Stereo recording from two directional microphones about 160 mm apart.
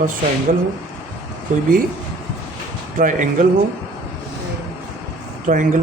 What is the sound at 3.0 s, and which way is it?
Speech, 55° right (ahead or behind).